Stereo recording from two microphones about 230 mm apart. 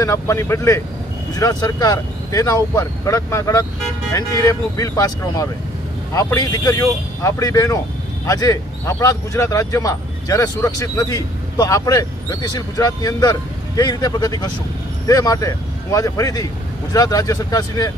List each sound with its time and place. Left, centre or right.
0.0 s speech: centre